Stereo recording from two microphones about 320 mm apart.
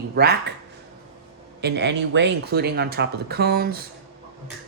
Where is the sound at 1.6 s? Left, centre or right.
Right.